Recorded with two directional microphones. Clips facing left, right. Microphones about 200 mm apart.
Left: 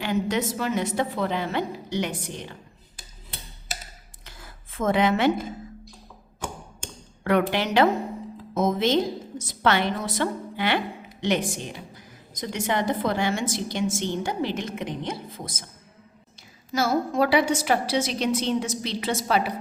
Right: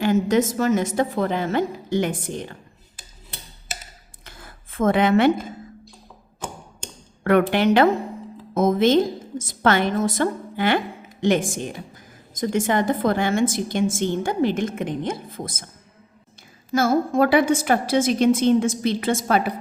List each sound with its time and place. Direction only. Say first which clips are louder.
0.0 s a woman's voice: right 6 dB; 45° right (ahead or behind)
4.3 s a sound: right 3 dB; 55° right (ahead or behind)
7.3 s a woman's voice: right 5 dB; 55° right (ahead or behind)
16.7 s a woman's voice: right 4 dB; 50° right (ahead or behind)